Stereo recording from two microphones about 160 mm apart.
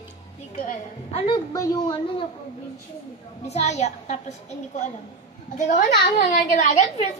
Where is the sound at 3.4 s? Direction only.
45° left (ahead or behind).